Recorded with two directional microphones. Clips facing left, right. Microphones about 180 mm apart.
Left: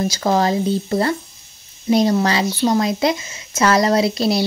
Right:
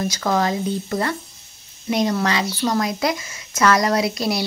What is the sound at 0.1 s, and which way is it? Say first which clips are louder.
Speech: left 3 dB; 30° left (ahead or behind).